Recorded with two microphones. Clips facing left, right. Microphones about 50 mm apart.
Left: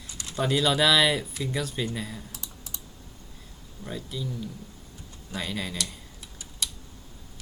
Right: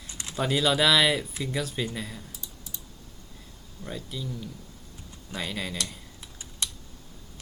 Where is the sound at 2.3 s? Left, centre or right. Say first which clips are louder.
Left 1 dB; left.